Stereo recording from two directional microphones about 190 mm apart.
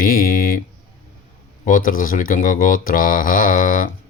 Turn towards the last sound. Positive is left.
turn(degrees=45)  # may be behind; listen again after turning